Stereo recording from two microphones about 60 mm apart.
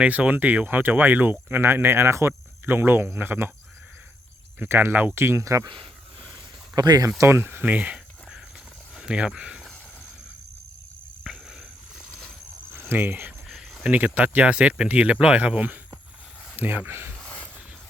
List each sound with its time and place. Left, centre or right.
0.0 s speech: right
2.6 s speech: right
4.6 s speech: right
6.7 s speech: right
7.3 s speech: right
9.0 s speech: centre
11.3 s walk: centre
12.7 s speech: right
13.5 s a sound: centre
13.8 s speech: right
17.2 s a sound: centre